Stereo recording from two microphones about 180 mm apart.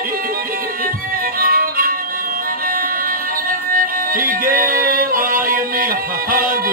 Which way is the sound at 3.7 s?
50° right (ahead or behind).